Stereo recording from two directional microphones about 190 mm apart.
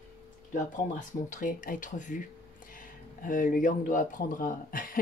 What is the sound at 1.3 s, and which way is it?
Speech, 45° left (ahead or behind).